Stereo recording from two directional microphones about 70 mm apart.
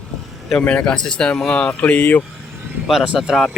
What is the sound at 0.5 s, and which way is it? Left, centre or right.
Speech, centre.